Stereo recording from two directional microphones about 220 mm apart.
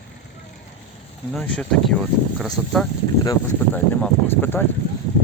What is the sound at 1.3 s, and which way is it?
Speech, 5° left (ahead or behind).